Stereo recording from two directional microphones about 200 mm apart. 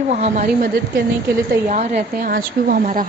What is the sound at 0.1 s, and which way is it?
A woman's voice, 35° right (ahead or behind).